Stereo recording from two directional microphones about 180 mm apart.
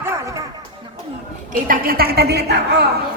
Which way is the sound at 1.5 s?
55° right (ahead or behind).